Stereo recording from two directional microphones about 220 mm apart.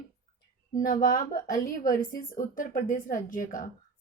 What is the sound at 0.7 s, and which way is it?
A woman's voice, 35° left (ahead or behind).